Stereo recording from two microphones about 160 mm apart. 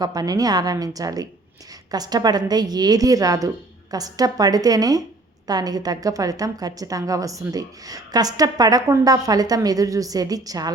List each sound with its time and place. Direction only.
0.0 s a woman's voice: 25° right (ahead or behind)